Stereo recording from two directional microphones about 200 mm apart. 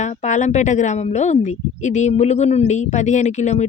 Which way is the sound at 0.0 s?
35° left (ahead or behind).